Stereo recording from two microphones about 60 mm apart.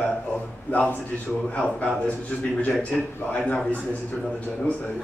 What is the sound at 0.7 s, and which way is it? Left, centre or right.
Speech, left.